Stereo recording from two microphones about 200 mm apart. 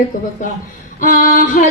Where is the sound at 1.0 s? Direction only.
40° left (ahead or behind).